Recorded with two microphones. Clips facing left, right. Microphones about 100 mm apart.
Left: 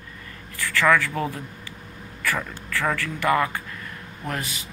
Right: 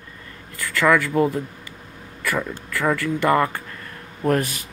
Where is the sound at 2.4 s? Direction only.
15° right (ahead or behind).